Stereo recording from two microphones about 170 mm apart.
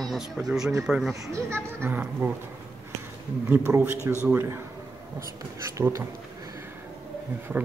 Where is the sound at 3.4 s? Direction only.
10° right (ahead or behind).